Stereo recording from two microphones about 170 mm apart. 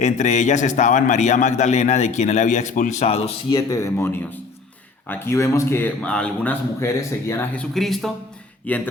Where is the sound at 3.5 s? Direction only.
20° left (ahead or behind).